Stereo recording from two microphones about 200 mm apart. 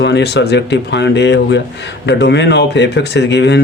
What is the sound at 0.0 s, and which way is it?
Speech, 60° left (ahead or behind).